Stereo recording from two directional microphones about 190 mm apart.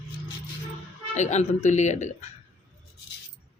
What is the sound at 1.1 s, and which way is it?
A woman's voice, 40° left (ahead or behind).